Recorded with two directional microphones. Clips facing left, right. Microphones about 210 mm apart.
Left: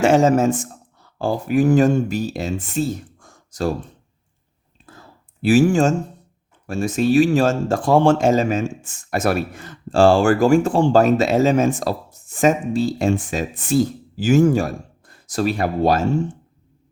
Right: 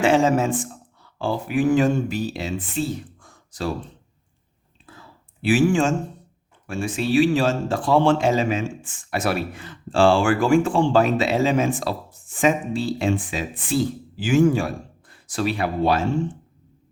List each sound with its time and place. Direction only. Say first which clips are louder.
0.0 s speech: left 3 dB; 45° left (ahead or behind)
4.9 s a sound: left 1 dB; 40° left (ahead or behind)
6.7 s speech: left 5 dB; 40° left (ahead or behind)